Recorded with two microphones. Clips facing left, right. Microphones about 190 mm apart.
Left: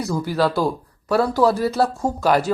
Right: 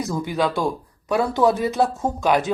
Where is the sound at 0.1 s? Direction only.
Centre (ahead or behind).